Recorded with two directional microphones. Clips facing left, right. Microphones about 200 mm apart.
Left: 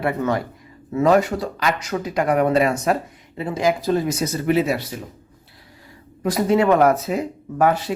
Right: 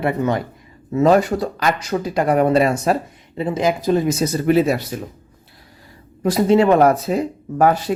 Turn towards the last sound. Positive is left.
turn(degrees=-35)  # may be behind; listen again after turning